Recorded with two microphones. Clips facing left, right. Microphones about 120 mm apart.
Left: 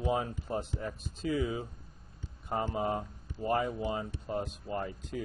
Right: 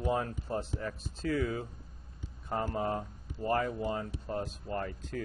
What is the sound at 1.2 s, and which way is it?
Speech, 60° right (ahead or behind).